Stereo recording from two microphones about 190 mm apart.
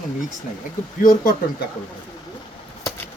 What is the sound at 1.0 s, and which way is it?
Speech, 50° left (ahead or behind).